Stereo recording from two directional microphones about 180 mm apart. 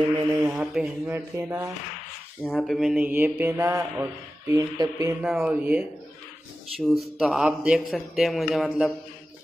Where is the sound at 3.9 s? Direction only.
15° right (ahead or behind).